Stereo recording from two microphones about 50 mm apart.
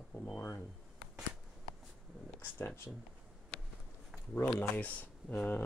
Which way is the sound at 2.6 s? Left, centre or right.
Left.